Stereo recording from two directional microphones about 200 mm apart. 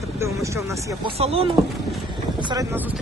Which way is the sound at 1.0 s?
30° right (ahead or behind).